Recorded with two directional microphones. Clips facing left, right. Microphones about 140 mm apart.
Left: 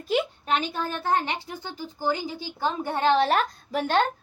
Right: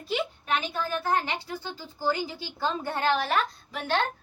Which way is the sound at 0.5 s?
30° left (ahead or behind).